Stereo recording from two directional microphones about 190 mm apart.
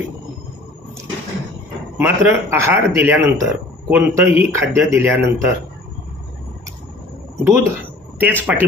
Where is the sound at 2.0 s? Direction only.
10° right (ahead or behind).